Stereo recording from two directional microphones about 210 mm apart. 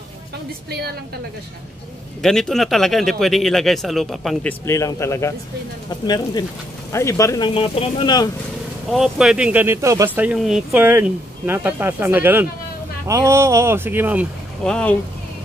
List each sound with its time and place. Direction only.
2.2 s speech: centre (ahead or behind); by 8.3 s 20° left (ahead or behind)
8.9 s speech: centre (ahead or behind)
14.6 s speech: 5° left (ahead or behind)